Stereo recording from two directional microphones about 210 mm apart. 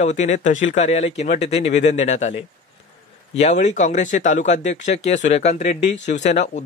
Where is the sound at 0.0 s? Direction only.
35° left (ahead or behind).